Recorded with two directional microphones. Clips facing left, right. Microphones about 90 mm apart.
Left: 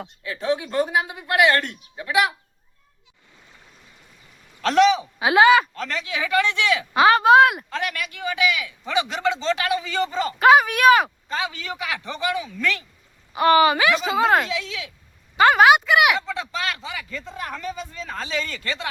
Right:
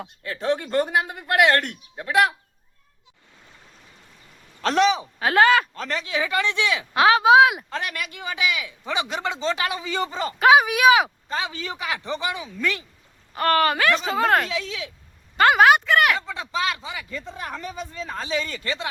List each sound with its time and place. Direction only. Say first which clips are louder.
0.2 s speech: even; 55° right (ahead or behind)
4.6 s speech: left 3 dB; 30° right (ahead or behind)
5.2 s speech: left 2 dB; 5° left (ahead or behind)
5.7 s a man's voice: right 1 dB; 30° right (ahead or behind)
6.9 s speech: left 1 dB; centre (ahead or behind)
7.7 s a man's voice: left 2 dB; 30° right (ahead or behind)
10.3 s speech: left 1 dB; centre (ahead or behind)
11.3 s a man's voice: left 1 dB; 30° right (ahead or behind)
13.3 s speech: left 4 dB; 10° left (ahead or behind)
14.5 s speech: even; 30° right (ahead or behind)
15.4 s speech: left 1 dB; centre (ahead or behind)
16.2 s a man's voice: right 1 dB; 20° right (ahead or behind)